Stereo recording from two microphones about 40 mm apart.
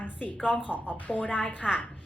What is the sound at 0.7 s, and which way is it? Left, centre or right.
Speech, right.